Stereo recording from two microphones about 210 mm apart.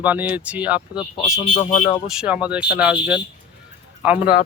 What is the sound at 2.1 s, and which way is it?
Speech, 5° right (ahead or behind).